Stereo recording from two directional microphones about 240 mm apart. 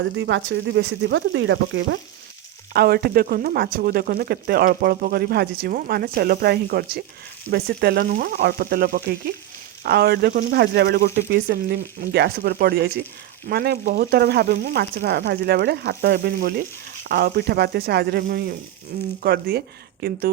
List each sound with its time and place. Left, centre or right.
0.0 s speech: right